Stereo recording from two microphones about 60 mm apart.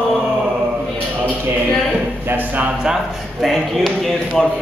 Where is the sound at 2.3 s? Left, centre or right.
Right.